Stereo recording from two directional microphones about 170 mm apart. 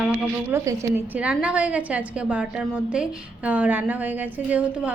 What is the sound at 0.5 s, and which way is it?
A woman's voice, 15° right (ahead or behind).